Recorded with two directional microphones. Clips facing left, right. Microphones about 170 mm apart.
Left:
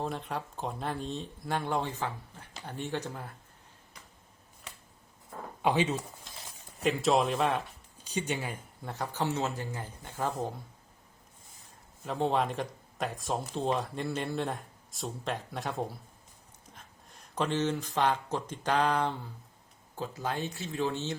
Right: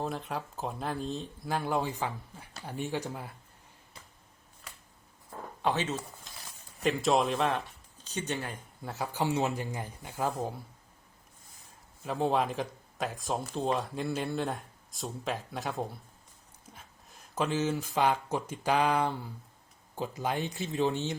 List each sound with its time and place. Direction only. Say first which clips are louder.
0.0 s a man's voice: even; centre (ahead or behind)
5.6 s speech: left 3 dB; 10° left (ahead or behind)
6.8 s speech: even; centre (ahead or behind)
8.0 s speech: left 2 dB; 10° left (ahead or behind)
8.8 s a man's voice: right 1 dB; 5° right (ahead or behind)
12.0 s a man's voice: even; 5° right (ahead or behind)